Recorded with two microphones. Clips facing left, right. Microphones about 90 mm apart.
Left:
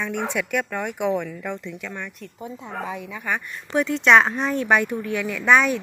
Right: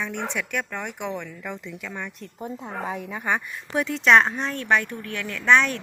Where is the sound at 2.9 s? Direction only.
45° right (ahead or behind).